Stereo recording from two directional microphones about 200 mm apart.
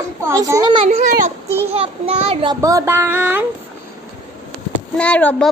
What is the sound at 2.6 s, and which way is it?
Speech, 15° right (ahead or behind).